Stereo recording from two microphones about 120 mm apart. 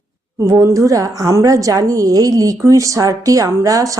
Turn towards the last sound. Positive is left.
turn(degrees=-25)  # may be behind; listen again after turning